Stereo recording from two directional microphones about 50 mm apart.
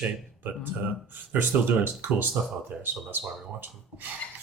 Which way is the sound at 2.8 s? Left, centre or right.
Right.